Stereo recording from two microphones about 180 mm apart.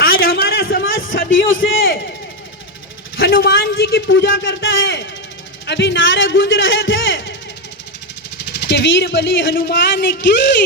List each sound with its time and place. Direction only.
0.0 s a sound: 60° left (ahead or behind); by 1.2 s 90° left
1.3 s a man's voice: 90° left
3.2 s a man's voice: 60° left (ahead or behind); by 5.0 s 85° left
5.6 s a man's voice: 75° left (ahead or behind); by 7.3 s 90° left
8.4 s a man's voice: 70° left (ahead or behind)